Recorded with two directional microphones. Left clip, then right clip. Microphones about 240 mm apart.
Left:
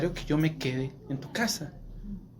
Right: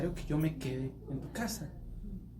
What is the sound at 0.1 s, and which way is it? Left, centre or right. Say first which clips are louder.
Speech: left 7 dB; left.